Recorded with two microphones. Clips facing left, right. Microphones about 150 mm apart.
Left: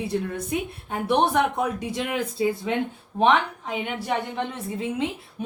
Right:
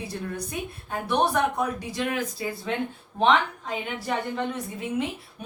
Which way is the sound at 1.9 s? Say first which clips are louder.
Left 2 dB; 25° left (ahead or behind).